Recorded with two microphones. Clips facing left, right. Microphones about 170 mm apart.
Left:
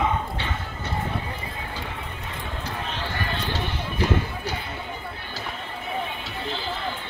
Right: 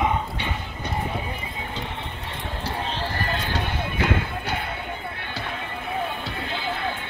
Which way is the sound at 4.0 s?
60° right (ahead or behind).